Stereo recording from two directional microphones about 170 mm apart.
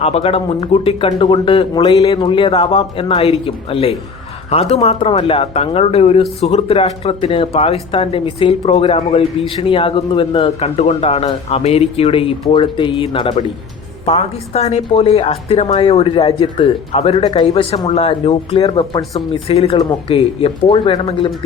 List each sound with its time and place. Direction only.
0.0 s speech: 35° left (ahead or behind)
19.7 s speech: 20° left (ahead or behind)
20.1 s speech: 35° left (ahead or behind)